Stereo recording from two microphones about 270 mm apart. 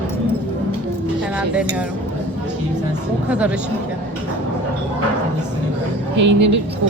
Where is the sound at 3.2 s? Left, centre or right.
Centre.